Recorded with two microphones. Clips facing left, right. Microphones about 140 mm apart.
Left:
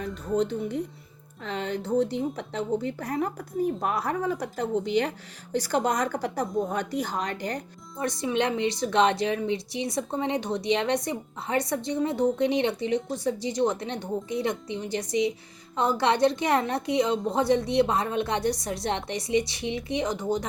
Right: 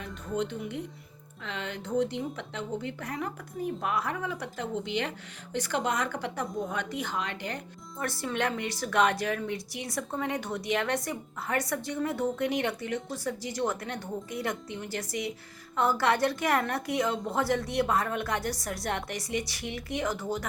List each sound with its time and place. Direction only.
0.0 s a woman's voice: 35° left (ahead or behind)
7.9 s a woman's voice: 20° left (ahead or behind)